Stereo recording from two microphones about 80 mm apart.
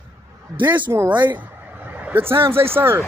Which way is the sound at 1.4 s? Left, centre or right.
Right.